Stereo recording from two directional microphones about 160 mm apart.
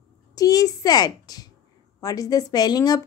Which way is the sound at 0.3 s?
25° left (ahead or behind).